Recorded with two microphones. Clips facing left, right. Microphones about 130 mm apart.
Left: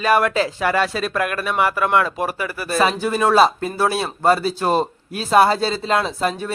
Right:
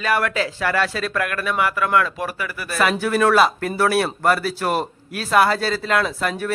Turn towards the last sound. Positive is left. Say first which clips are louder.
# left 1 dB
turn(degrees=25)  # may be behind; listen again after turning